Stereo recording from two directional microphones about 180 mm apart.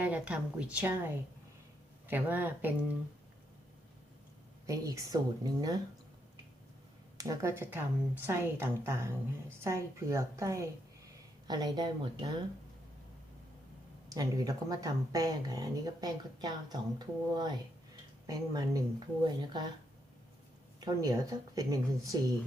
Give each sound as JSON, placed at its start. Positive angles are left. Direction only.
{"t": 0.0, "sound": "a woman's voice", "side_deg": -10}
{"t": 4.6, "sound": "speech", "side_deg": -20}
{"t": 7.2, "sound": "a woman's voice", "side_deg": -15}
{"t": 14.1, "sound": "speech", "side_deg": -20}
{"t": 20.8, "sound": "speech", "side_deg": -20}